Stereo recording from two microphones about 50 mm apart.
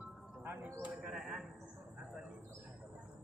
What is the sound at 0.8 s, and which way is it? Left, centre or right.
Bird, right.